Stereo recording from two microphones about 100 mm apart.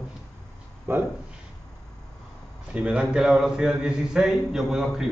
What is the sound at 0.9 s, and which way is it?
Speech, 25° right (ahead or behind).